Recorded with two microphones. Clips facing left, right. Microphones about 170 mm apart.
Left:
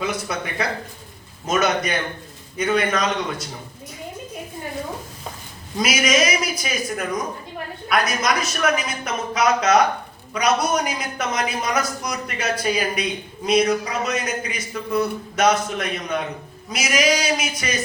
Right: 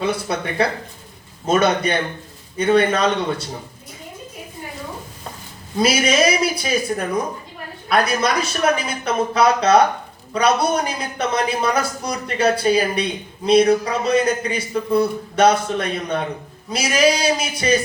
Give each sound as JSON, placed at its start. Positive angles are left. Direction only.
{"t": 0.0, "sound": "speech", "side_deg": -30}
{"t": 5.8, "sound": "speech", "side_deg": -30}